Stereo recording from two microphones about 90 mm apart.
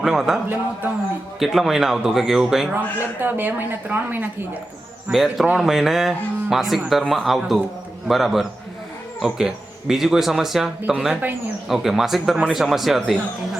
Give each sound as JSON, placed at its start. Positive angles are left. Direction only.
{"t": 0.0, "sound": "speech", "side_deg": -5}
{"t": 0.4, "sound": "a woman's voice", "side_deg": -20}
{"t": 1.4, "sound": "speech", "side_deg": 0}
{"t": 3.2, "sound": "a woman's voice", "side_deg": -20}
{"t": 5.0, "sound": "speech", "side_deg": -5}